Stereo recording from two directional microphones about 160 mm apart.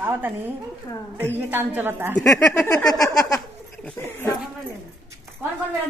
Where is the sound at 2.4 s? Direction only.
15° left (ahead or behind).